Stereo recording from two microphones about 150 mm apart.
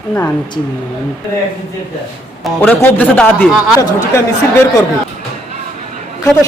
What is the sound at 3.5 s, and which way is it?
Speech, 5° right (ahead or behind).